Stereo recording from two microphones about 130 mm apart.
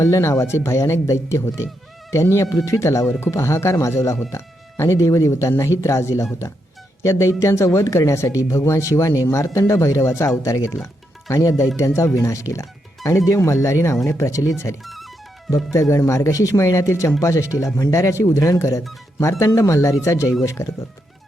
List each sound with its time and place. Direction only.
0.0 s speech: 20° left (ahead or behind)
14.8 s music: centre (ahead or behind)
15.7 s speech: 25° left (ahead or behind)